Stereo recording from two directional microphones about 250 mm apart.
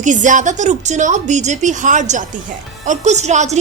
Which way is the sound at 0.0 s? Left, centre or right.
Right.